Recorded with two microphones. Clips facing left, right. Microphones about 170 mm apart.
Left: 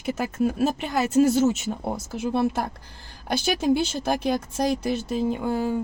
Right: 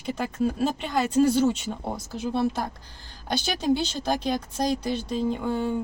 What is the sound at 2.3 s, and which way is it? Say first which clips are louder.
Speech: left 2 dB; 50° left (ahead or behind).